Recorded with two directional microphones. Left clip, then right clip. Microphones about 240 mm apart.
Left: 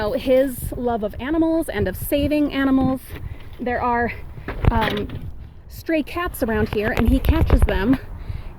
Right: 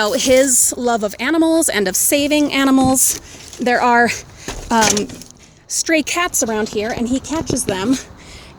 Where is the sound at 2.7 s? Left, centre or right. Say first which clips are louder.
Right 7 dB; right.